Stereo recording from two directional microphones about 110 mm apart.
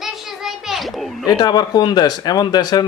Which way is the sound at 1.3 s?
35° left (ahead or behind).